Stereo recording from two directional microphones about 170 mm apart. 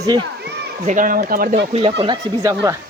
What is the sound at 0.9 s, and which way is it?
Speech, 50° right (ahead or behind).